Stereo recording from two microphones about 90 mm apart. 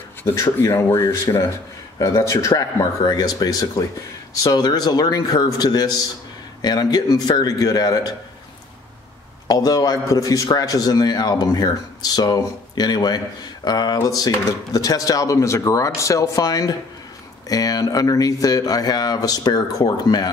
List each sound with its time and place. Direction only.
0.2 s a man's voice: 40° left (ahead or behind)
9.5 s a man's voice: 45° left (ahead or behind)